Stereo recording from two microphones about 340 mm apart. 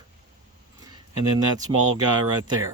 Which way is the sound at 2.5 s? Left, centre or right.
Centre.